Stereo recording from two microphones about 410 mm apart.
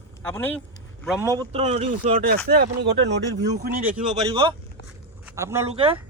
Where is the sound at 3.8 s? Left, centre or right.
Centre.